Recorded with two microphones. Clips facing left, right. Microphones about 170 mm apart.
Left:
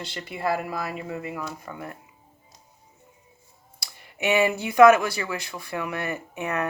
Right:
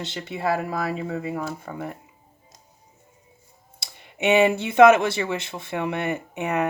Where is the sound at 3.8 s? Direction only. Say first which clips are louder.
Right 4 dB; 25° right (ahead or behind).